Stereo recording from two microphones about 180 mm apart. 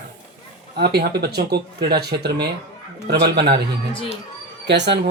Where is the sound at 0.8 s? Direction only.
60° right (ahead or behind).